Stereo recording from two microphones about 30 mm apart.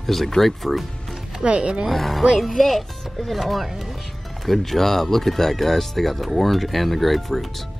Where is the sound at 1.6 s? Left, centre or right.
Right.